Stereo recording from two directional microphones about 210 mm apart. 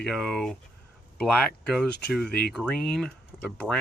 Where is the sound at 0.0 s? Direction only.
Centre (ahead or behind).